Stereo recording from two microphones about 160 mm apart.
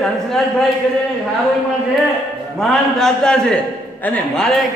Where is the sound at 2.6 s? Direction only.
5° left (ahead or behind).